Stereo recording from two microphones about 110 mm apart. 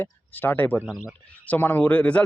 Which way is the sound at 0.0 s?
15° left (ahead or behind).